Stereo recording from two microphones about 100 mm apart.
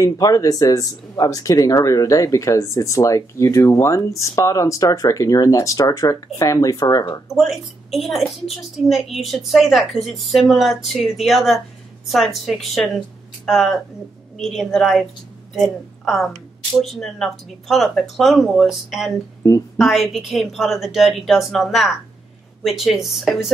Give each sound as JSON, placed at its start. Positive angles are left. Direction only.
{"t": 0.0, "sound": "speech", "side_deg": 35}
{"t": 7.2, "sound": "a woman's voice", "side_deg": 0}
{"t": 19.4, "sound": "speech", "side_deg": 35}
{"t": 19.8, "sound": "a woman's voice", "side_deg": 0}